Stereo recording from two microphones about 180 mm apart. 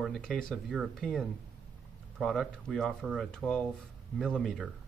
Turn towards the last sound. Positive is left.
turn(degrees=0)  # may be behind; listen again after turning